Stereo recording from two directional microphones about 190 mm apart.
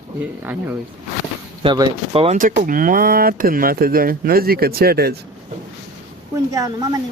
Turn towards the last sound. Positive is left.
turn(degrees=-20)  # may be behind; listen again after turning